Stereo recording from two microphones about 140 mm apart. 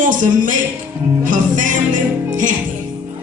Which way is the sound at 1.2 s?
65° right (ahead or behind).